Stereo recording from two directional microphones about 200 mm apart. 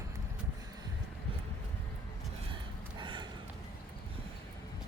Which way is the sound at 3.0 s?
25° right (ahead or behind).